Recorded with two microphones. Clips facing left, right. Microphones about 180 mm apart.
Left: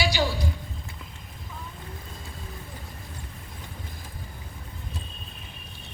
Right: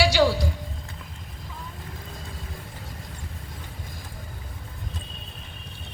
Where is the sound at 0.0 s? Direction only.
75° right (ahead or behind).